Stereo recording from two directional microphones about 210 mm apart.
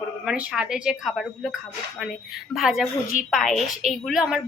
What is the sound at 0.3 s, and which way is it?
Speech, 5° right (ahead or behind).